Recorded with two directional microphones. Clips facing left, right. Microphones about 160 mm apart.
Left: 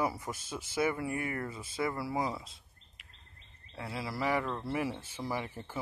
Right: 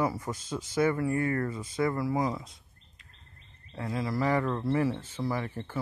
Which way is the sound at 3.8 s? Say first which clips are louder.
Right 6 dB; 10° left (ahead or behind).